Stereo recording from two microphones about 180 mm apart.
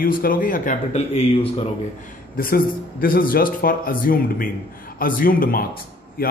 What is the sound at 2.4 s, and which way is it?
A man's voice, 50° left (ahead or behind).